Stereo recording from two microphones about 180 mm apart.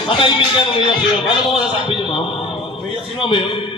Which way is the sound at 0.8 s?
30° left (ahead or behind).